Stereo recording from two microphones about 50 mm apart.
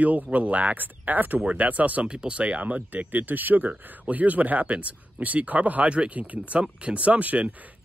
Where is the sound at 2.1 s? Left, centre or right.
Right.